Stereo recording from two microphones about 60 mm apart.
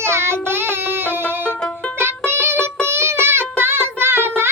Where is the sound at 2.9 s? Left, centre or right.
Right.